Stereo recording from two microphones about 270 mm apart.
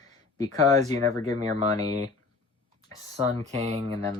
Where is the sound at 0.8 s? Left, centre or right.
Right.